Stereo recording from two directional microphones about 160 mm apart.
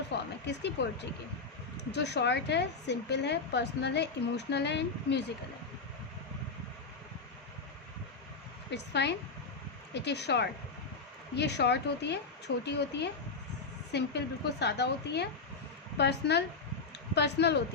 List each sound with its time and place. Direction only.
0.1 s a sound: 90° left
0.4 s speech: 90° left
8.7 s speech: 90° left